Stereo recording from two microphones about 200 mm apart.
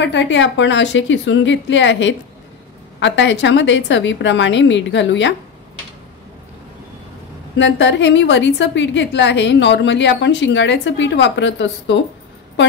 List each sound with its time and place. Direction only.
0.0 s a woman's voice: 65° left (ahead or behind)
7.5 s a woman's voice: 65° left (ahead or behind)